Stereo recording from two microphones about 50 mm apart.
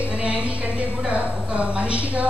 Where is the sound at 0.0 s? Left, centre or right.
Right.